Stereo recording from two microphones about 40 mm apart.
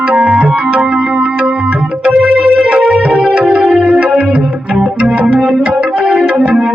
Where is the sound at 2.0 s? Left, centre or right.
Right.